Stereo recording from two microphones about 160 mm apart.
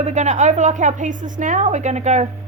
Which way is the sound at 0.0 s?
45° right (ahead or behind).